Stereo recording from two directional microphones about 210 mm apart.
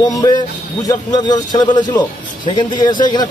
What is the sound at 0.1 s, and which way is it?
A man's voice, 15° left (ahead or behind).